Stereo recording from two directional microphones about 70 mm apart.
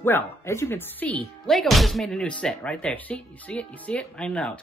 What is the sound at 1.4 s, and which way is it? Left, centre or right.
Speech, centre.